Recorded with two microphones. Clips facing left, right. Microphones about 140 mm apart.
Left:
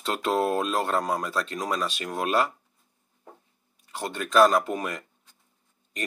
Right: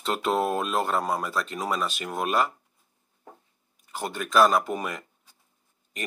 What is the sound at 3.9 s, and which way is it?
Speech, 5° right (ahead or behind).